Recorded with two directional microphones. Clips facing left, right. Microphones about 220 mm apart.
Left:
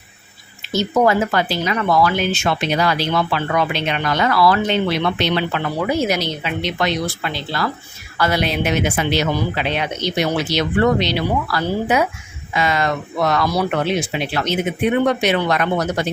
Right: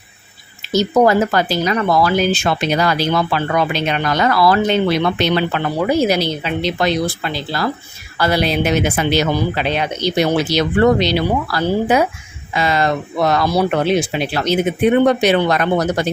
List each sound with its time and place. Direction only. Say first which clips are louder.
0.7 s speech: right 3 dB; 40° right (ahead or behind)